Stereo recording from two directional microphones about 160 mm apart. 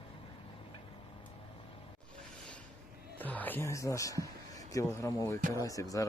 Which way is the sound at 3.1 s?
10° left (ahead or behind).